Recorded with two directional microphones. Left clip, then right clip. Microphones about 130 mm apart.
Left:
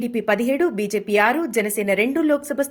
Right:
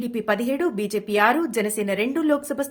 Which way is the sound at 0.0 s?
30° left (ahead or behind).